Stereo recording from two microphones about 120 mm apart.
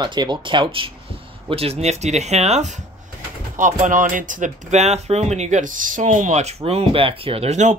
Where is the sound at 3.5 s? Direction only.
90° right; by 7.5 s 50° right (ahead or behind).